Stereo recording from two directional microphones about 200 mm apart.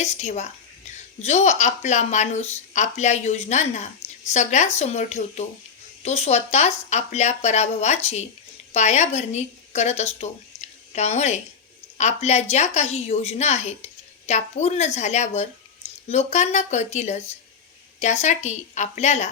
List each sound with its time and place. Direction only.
0.0 s a woman's voice: 35° left (ahead or behind)